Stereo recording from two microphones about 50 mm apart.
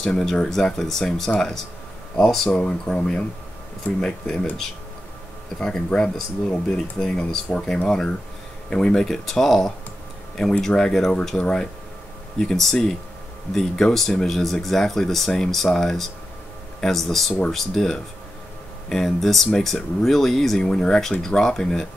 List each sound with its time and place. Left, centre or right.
0.2 s speech: centre
5.6 s speech: centre
7.5 s speech: centre
9.0 s speech: centre
10.8 s speech: centre